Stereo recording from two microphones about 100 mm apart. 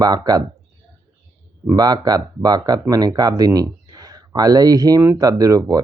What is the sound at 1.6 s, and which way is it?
Speech, 40° right (ahead or behind).